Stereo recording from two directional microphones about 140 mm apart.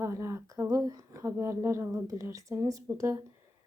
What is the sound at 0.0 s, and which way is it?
Speech, 20° right (ahead or behind).